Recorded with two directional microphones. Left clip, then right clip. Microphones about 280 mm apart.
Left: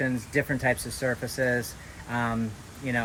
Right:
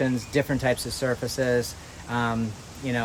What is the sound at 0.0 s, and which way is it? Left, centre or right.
Speech, centre.